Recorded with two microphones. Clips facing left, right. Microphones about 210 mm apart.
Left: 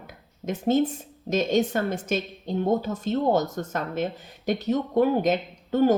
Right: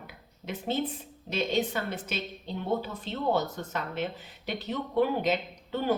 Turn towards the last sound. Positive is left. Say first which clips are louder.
# left 8 dB
turn(degrees=45)  # may be behind; listen again after turning